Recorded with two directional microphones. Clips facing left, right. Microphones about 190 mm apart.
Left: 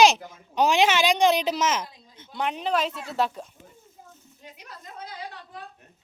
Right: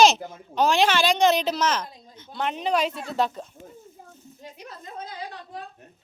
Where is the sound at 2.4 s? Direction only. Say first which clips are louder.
Right 1 dB; 5° left (ahead or behind).